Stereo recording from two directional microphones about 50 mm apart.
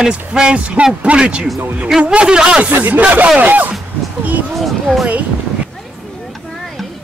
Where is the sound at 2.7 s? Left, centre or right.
Right.